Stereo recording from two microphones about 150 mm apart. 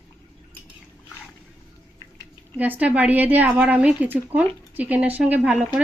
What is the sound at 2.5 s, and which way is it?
Speech, 10° right (ahead or behind).